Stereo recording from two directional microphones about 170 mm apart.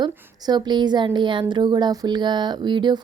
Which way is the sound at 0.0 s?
25° right (ahead or behind).